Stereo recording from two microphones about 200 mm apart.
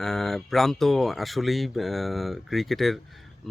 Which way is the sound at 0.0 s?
Centre (ahead or behind).